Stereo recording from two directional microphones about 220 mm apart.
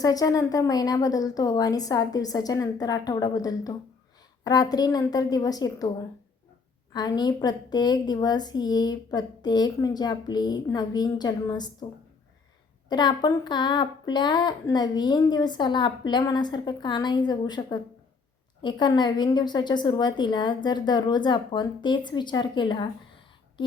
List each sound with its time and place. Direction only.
0.0 s a woman's voice: 15° left (ahead or behind)
6.9 s speech: 20° left (ahead or behind)
12.9 s speech: 20° left (ahead or behind)